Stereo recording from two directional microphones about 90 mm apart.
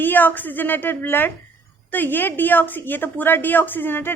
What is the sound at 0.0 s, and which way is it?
A woman's voice, 20° left (ahead or behind).